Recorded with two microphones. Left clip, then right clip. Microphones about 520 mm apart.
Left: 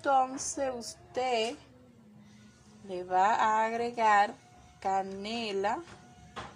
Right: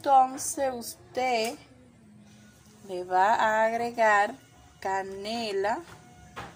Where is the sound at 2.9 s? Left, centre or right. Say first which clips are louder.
Right 3 dB; left.